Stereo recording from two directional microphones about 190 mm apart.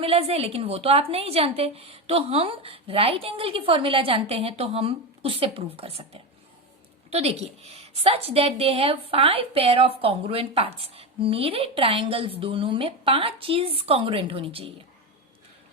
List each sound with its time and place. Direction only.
0.0 s a woman's voice: 30° right (ahead or behind)